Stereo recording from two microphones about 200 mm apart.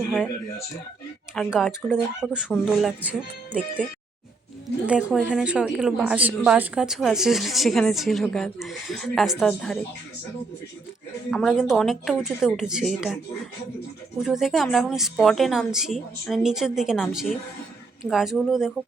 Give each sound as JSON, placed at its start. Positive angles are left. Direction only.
{"t": 1.4, "sound": "a woman's voice", "side_deg": 0}
{"t": 4.9, "sound": "a woman's voice", "side_deg": -5}
{"t": 11.3, "sound": "a woman's voice", "side_deg": 0}
{"t": 14.2, "sound": "a woman's voice", "side_deg": 0}